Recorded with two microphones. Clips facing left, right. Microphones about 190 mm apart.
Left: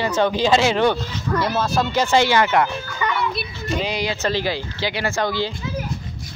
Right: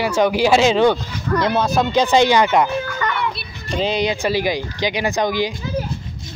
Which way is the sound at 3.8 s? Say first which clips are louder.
Right 8 dB; 20° right (ahead or behind).